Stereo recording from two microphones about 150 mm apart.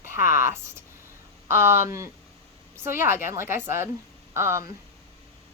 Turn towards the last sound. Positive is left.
turn(degrees=-15)  # may be behind; listen again after turning